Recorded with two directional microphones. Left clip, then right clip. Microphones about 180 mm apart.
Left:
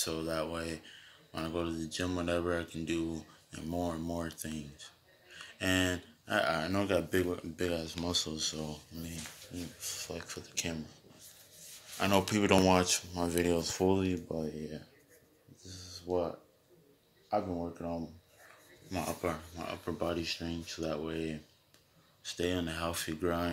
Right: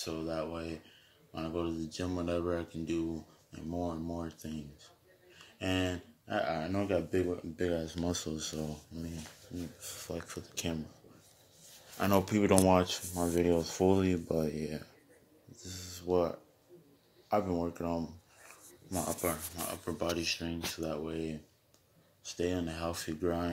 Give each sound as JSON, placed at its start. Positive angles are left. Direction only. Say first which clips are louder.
{"t": 0.0, "sound": "speech", "louder": "left 2 dB", "side_deg": 5}
{"t": 7.5, "sound": "speech", "louder": "right 2 dB", "side_deg": -20}
{"t": 7.8, "sound": "speech", "louder": "left 2 dB", "side_deg": -30}
{"t": 12.0, "sound": "speech", "louder": "even", "side_deg": -25}
{"t": 12.3, "sound": "speech", "louder": "right 1 dB", "side_deg": -15}
{"t": 14.2, "sound": "speech", "louder": "right 4 dB", "side_deg": -45}
{"t": 15.5, "sound": "a sound", "louder": "right 2 dB", "side_deg": -45}
{"t": 17.3, "sound": "speech", "louder": "right 2 dB", "side_deg": -45}
{"t": 18.9, "sound": "speech", "louder": "right 1 dB", "side_deg": -10}